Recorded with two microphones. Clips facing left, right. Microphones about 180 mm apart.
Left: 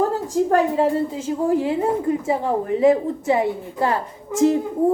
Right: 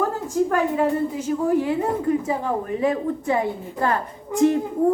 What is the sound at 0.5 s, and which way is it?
A woman's voice, 25° left (ahead or behind).